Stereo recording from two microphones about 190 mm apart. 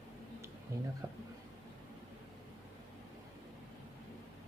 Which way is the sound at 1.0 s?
25° right (ahead or behind).